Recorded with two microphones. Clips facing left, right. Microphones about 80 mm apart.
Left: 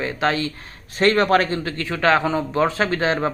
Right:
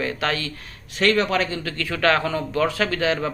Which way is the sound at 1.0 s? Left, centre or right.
Left.